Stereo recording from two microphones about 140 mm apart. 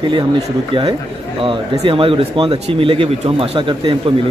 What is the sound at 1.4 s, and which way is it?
Speech, 40° right (ahead or behind).